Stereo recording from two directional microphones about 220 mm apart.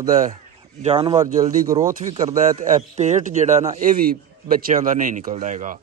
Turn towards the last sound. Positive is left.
turn(degrees=-35)  # may be behind; listen again after turning